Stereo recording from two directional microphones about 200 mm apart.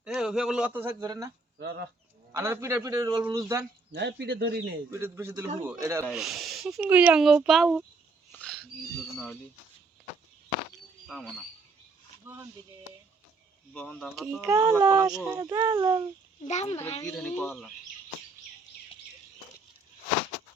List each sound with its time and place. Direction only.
0.0 s a child's voice: 5° right (ahead or behind)
1.5 s speech: 55° right (ahead or behind)
2.3 s a child's voice: 15° right (ahead or behind)
3.9 s speech: 60° right (ahead or behind)
4.9 s a child's voice: 10° right (ahead or behind)
6.1 s speech: centre (ahead or behind)
8.3 s wild animals: 5° left (ahead or behind)
9.1 s speech: 5° left (ahead or behind)
11.0 s speech: centre (ahead or behind)
12.2 s speech: 15° right (ahead or behind)
13.7 s speech: 5° left (ahead or behind)
14.4 s a child's voice: 15° right (ahead or behind)
16.5 s speech: 35° left (ahead or behind)
17.2 s speech: 5° left (ahead or behind)